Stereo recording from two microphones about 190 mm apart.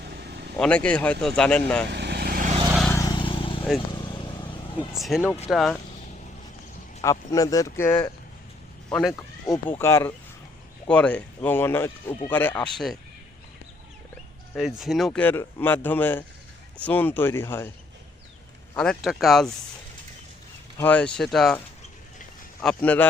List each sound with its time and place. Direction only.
0.0 s vehicle: 60° right (ahead or behind)
0.5 s speech: 5° left (ahead or behind)
1.9 s vehicle: 60° right (ahead or behind)
2.9 s vehicle: 20° left (ahead or behind)
4.9 s speech: centre (ahead or behind)
7.0 s speech: 15° left (ahead or behind)
8.9 s speech: 5° left (ahead or behind)
14.5 s speech: centre (ahead or behind)
18.8 s speech: centre (ahead or behind)
20.7 s speech: 10° left (ahead or behind)
22.6 s speech: 10° left (ahead or behind)